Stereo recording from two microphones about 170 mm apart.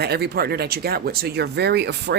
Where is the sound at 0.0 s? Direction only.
70° right (ahead or behind).